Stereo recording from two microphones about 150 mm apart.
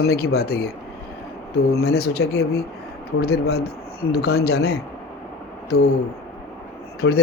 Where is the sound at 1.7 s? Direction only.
90° left.